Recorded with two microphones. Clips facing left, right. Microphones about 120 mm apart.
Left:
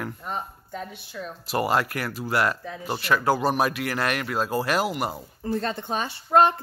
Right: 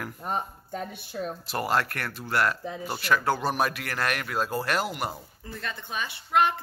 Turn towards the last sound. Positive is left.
turn(degrees=35)  # may be behind; listen again after turning